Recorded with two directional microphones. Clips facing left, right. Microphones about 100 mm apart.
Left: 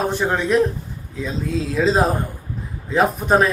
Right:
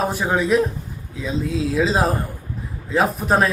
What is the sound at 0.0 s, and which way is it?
Speech, 5° right (ahead or behind).